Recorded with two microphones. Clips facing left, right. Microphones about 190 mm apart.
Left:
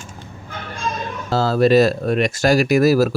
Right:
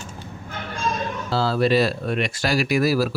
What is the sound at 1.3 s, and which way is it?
Speech, 45° left (ahead or behind).